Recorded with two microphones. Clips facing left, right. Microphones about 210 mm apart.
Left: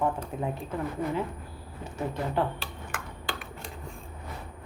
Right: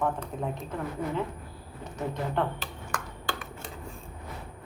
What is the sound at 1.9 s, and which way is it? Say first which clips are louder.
Speech: left 1 dB; 5° left (ahead or behind).